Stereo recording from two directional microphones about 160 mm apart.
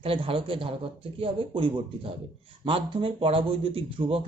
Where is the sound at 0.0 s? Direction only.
35° right (ahead or behind).